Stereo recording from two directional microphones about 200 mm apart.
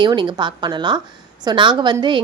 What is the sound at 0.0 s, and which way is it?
A woman's voice, 20° right (ahead or behind).